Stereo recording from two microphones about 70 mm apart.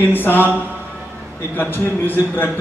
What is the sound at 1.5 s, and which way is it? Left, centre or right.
Speech, left.